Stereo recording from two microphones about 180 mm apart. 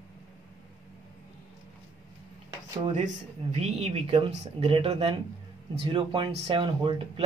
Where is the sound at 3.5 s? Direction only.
35° right (ahead or behind).